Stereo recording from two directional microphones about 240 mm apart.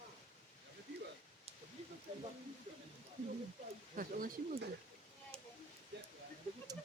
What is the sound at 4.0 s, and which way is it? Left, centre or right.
Speech, right.